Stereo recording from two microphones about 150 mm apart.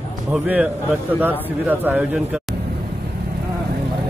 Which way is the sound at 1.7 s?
15° right (ahead or behind).